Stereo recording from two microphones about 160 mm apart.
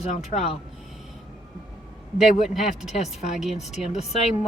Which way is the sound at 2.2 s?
Centre (ahead or behind).